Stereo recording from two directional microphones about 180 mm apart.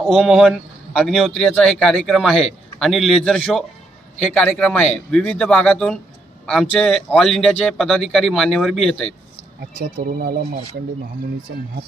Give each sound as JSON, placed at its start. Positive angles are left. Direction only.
{"t": 0.0, "sound": "speech", "side_deg": 0}
{"t": 9.7, "sound": "speech", "side_deg": -55}